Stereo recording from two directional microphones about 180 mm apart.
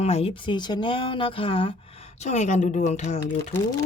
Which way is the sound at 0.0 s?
35° left (ahead or behind).